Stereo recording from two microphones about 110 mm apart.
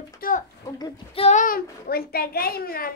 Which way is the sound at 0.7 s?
40° left (ahead or behind).